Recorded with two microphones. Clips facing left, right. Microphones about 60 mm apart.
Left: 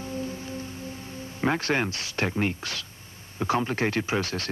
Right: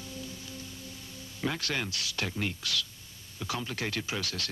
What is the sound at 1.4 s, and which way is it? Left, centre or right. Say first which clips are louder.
Speech: left 8 dB; left.